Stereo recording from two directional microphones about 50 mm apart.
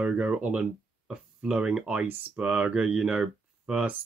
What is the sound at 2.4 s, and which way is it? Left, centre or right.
Speech, centre.